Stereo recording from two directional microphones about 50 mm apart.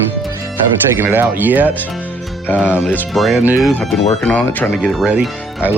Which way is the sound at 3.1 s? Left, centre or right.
Centre.